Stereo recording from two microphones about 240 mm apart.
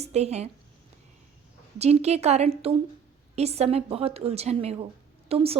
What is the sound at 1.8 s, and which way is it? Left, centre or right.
Speech, right.